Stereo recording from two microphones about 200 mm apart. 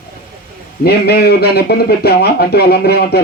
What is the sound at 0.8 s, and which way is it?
Speech, 50° left (ahead or behind).